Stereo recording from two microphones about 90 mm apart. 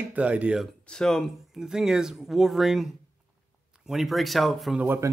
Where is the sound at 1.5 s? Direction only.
5° right (ahead or behind).